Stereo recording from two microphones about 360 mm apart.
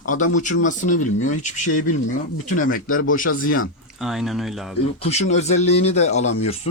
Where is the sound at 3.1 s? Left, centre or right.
Left.